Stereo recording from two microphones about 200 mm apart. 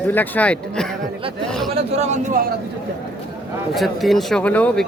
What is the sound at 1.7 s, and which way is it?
Speech, 35° right (ahead or behind).